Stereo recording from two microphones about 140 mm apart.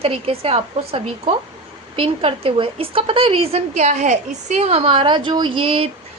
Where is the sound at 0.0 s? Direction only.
45° right (ahead or behind).